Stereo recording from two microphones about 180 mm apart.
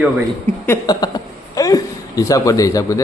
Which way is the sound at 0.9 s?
20° left (ahead or behind).